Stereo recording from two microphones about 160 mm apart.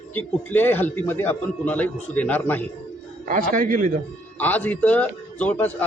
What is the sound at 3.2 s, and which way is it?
Speech, 55° right (ahead or behind).